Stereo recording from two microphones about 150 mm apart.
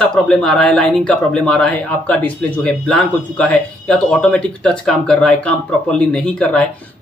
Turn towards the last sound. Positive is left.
turn(degrees=10)  # may be behind; listen again after turning